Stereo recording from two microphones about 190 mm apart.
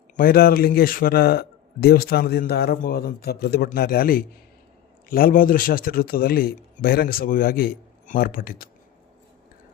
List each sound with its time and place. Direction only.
0.2 s a man's voice: 50° left (ahead or behind)